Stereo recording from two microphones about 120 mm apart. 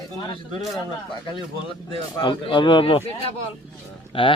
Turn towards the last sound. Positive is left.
turn(degrees=45)  # may be behind; listen again after turning